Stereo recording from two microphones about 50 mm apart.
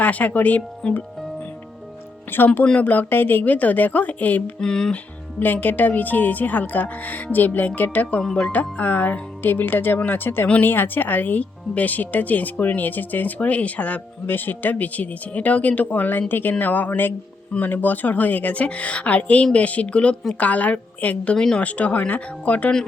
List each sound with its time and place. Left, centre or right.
0.0 s speech: left
0.8 s speech: centre
2.3 s speech: left
4.6 s speech: centre
5.4 s speech: left
8.2 s speech: centre
8.5 s speech: left
14.3 s speech: left
21.3 s speech: centre
21.6 s speech: left